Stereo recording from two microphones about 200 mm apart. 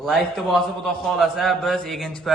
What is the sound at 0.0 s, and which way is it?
A man's voice, centre (ahead or behind).